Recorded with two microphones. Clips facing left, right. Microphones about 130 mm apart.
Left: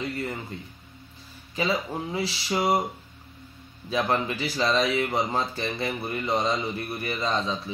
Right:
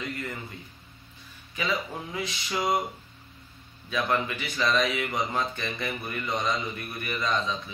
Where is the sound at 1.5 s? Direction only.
35° left (ahead or behind).